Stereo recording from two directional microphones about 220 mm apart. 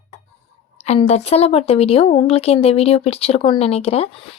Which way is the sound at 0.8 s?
30° left (ahead or behind).